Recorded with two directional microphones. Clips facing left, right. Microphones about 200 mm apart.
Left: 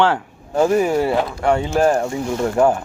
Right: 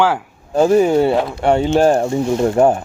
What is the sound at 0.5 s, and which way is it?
Speech, 30° right (ahead or behind).